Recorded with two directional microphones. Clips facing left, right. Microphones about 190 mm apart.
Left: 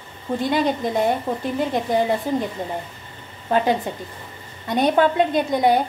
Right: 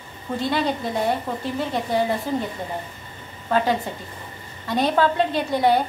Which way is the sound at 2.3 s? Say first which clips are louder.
Left 2 dB; 15° left (ahead or behind).